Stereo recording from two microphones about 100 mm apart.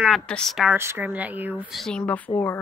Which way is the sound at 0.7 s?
20° right (ahead or behind).